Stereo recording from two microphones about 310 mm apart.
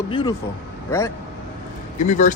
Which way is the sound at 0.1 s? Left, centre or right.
Centre.